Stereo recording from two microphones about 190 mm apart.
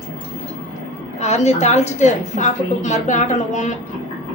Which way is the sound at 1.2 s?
35° left (ahead or behind).